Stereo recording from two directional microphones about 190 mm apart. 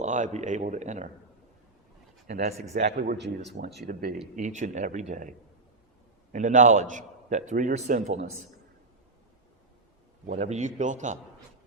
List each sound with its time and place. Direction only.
0.0 s a man's voice: 40° right (ahead or behind)
2.2 s a man's voice: 40° right (ahead or behind)
3.4 s a man's voice: 60° right (ahead or behind); by 5.3 s 40° right (ahead or behind)
6.3 s a man's voice: 40° right (ahead or behind)
10.2 s a man's voice: 35° right (ahead or behind)